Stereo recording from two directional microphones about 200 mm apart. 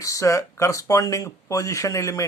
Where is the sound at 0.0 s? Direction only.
15° left (ahead or behind).